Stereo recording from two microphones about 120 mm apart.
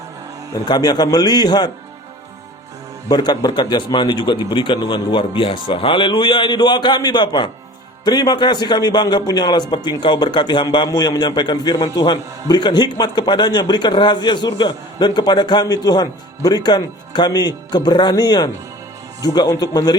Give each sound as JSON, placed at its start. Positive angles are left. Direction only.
{"t": 0.7, "sound": "a man's voice", "side_deg": 35}
{"t": 3.1, "sound": "a man's voice", "side_deg": 35}